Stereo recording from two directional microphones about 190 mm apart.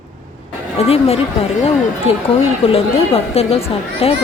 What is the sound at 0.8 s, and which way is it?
Speech, 30° left (ahead or behind).